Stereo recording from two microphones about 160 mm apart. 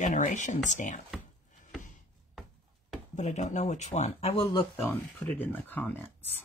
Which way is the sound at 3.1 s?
45° left (ahead or behind).